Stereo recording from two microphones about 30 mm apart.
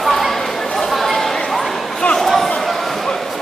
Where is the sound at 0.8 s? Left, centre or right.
Centre.